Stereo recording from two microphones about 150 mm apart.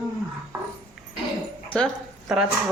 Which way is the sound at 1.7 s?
Centre (ahead or behind).